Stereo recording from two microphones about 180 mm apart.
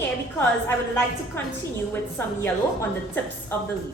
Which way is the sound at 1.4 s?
10° left (ahead or behind).